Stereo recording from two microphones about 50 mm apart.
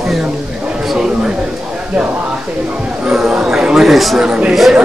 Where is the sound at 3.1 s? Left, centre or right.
Centre.